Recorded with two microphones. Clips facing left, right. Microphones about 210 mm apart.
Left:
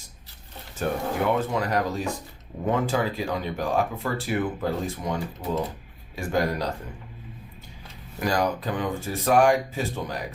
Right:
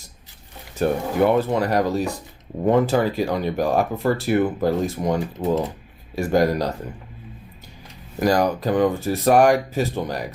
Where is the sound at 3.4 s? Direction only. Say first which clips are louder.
Right 4 dB; 40° right (ahead or behind).